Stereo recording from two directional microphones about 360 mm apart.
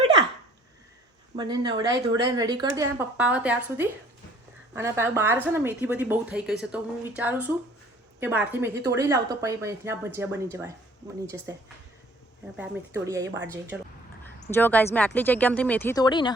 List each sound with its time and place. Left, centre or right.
1.4 s a woman's voice: centre
12.5 s a woman's voice: centre
14.5 s speech: centre